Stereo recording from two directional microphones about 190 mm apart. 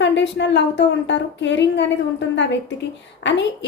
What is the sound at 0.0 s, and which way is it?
A woman's voice, 70° left (ahead or behind).